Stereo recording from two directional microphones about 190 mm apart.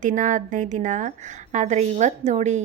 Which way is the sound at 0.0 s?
40° right (ahead or behind).